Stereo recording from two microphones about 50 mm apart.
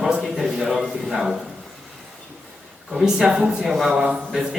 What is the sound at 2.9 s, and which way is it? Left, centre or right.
A man's voice, centre.